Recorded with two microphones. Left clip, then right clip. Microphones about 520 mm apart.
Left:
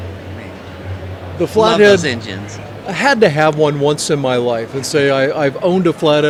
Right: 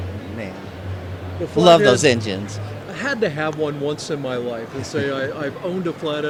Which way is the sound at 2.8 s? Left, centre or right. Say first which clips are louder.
Left 11 dB; left.